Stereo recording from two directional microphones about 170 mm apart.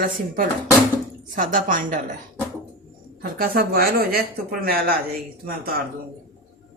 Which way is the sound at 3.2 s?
60° right (ahead or behind).